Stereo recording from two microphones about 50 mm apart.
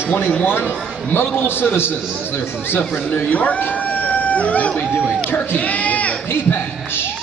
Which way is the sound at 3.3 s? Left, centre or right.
Left.